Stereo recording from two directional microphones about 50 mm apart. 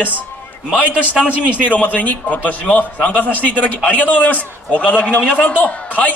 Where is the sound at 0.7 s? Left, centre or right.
Right.